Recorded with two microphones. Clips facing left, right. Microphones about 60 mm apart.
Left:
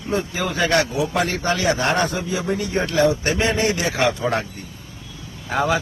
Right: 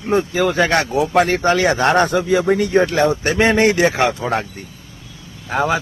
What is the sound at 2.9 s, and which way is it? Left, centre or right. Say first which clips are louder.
Speech: right 2 dB; right.